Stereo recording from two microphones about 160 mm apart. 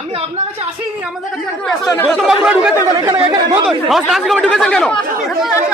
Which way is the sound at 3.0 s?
25° right (ahead or behind).